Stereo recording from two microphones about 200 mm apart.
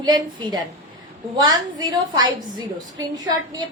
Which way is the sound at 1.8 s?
20° right (ahead or behind).